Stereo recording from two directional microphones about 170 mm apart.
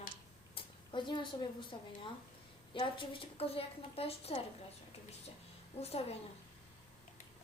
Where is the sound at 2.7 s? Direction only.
30° left (ahead or behind).